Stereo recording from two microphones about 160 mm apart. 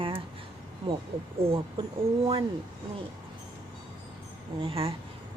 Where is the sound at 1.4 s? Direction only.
35° right (ahead or behind).